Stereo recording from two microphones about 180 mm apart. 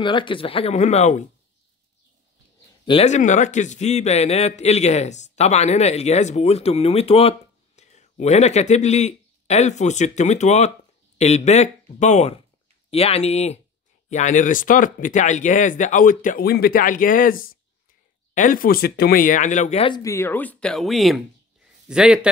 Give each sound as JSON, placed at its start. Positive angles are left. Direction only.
{"t": 0.0, "sound": "a man's voice", "side_deg": 25}
{"t": 2.8, "sound": "speech", "side_deg": 30}
{"t": 3.1, "sound": "a man's voice", "side_deg": 45}
{"t": 19.9, "sound": "a man's voice", "side_deg": 20}